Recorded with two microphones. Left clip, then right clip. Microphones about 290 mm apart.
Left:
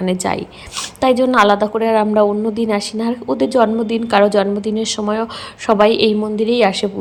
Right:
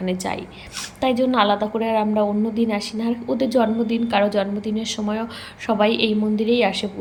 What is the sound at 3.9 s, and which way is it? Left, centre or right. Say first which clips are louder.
A woman's voice: left 7 dB; centre.